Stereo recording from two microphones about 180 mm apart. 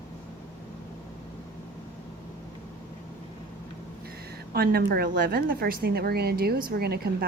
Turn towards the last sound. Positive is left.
turn(degrees=-60)  # may be behind; listen again after turning